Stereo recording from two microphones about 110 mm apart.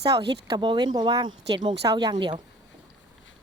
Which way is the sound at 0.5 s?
45° right (ahead or behind).